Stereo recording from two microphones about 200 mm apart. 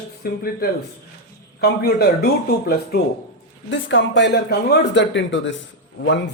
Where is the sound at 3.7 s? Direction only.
65° left (ahead or behind).